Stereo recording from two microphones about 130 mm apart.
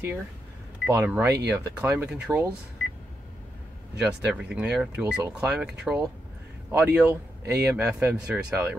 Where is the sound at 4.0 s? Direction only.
5° right (ahead or behind).